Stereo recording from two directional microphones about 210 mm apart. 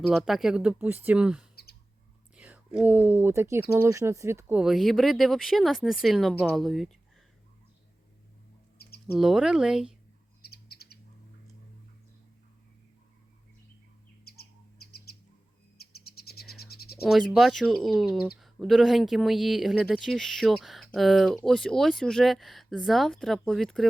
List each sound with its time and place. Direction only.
0.1 s speech: centre (ahead or behind)
8.8 s a sound: 50° left (ahead or behind)
9.1 s speech: centre (ahead or behind)
10.5 s bird: 50° left (ahead or behind)
14.3 s bird: 50° left (ahead or behind)
17.0 s speech: centre (ahead or behind)